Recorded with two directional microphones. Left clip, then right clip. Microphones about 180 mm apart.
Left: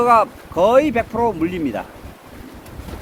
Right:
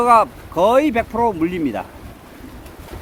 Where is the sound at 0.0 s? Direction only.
20° right (ahead or behind).